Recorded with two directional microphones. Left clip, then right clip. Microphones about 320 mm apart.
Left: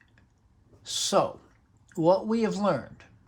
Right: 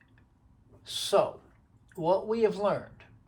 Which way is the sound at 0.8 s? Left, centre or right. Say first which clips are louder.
Left 1 dB; left.